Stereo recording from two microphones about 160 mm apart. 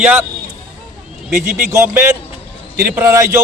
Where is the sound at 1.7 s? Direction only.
20° right (ahead or behind).